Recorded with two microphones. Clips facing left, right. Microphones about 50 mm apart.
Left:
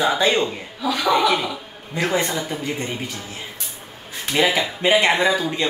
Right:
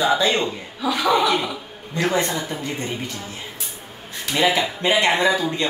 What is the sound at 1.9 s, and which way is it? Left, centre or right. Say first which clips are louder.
Speech: even; centre.